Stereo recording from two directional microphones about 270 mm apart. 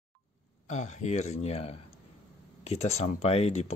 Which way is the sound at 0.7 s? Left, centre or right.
Left.